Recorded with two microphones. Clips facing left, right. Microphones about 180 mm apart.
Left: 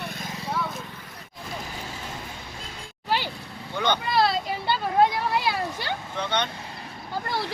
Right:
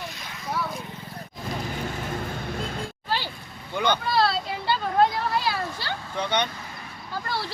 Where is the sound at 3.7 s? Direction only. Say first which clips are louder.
Right 1 dB; 10° right (ahead or behind).